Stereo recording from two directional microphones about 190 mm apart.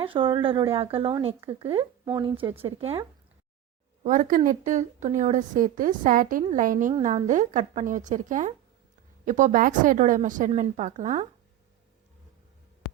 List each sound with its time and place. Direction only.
0.0 s speech: 25° right (ahead or behind)
4.0 s a woman's voice: 45° right (ahead or behind)